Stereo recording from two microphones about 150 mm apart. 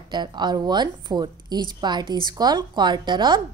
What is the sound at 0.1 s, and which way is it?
A woman's voice, 30° right (ahead or behind).